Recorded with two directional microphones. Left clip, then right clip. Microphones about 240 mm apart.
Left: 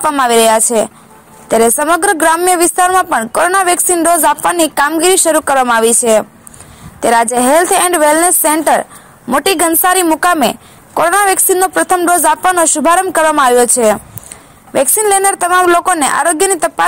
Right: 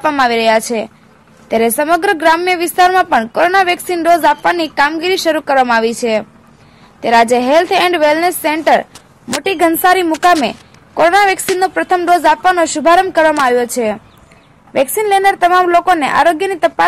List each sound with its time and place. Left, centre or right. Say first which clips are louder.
0.0 s a woman's voice: left 2 dB; centre